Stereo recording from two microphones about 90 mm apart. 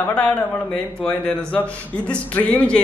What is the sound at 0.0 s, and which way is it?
Speech, 15° left (ahead or behind).